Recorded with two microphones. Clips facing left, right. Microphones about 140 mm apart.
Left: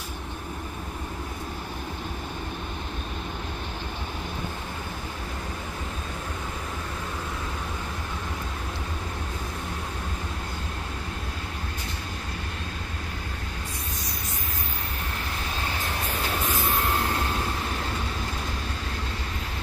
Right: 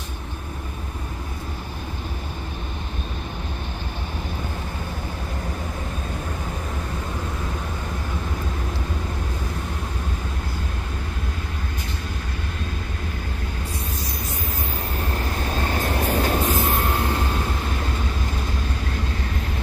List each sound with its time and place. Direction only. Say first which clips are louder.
15.6 s train: right 8 dB; 40° right (ahead or behind)